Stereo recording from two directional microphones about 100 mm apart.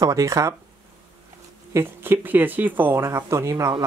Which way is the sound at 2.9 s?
30° right (ahead or behind).